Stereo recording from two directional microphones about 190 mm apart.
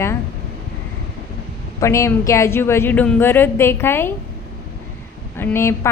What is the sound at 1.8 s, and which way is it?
A woman's voice, 15° left (ahead or behind).